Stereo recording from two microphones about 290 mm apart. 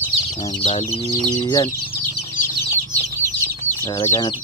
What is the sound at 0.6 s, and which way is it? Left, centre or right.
Speech, left.